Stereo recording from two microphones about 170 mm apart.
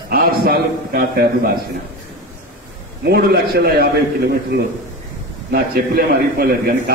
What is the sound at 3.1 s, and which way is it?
Speech, 65° right (ahead or behind).